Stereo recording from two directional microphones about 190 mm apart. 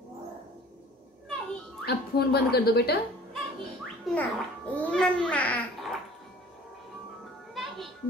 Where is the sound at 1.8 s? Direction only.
55° left (ahead or behind).